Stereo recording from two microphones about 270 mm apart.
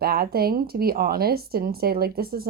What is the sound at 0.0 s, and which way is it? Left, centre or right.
Speech, right.